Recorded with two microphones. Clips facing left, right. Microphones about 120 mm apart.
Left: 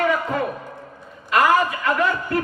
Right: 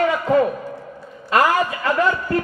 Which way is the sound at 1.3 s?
35° right (ahead or behind).